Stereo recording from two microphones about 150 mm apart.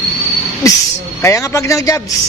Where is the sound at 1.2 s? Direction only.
20° left (ahead or behind).